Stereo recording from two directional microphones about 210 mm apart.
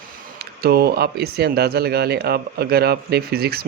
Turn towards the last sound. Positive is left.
turn(degrees=-50)  # may be behind; listen again after turning